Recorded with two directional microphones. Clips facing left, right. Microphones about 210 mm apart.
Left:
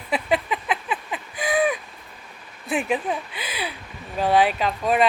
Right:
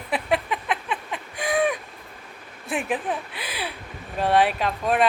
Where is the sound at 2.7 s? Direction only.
Centre (ahead or behind).